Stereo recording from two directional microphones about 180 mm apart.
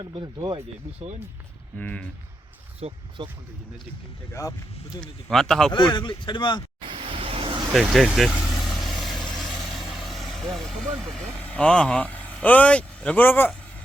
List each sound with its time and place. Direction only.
0.0 s speech: 25° right (ahead or behind)
1.8 s speech: 10° left (ahead or behind)
2.8 s speech: 35° right (ahead or behind)
4.9 s speech: 5° left (ahead or behind)
5.7 s speech: 25° left (ahead or behind)
6.8 s vehicle: 30° right (ahead or behind)
7.7 s vehicle: centre (ahead or behind)